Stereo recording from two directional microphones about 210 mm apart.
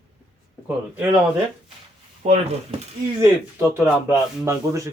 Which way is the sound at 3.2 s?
10° right (ahead or behind).